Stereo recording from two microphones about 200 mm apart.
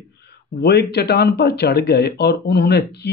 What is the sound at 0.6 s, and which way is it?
Speech, 55° left (ahead or behind).